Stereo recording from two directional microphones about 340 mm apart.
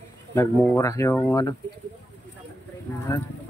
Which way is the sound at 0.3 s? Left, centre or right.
Centre.